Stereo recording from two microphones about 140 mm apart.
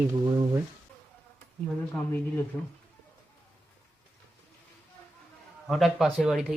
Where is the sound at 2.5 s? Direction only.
10° left (ahead or behind).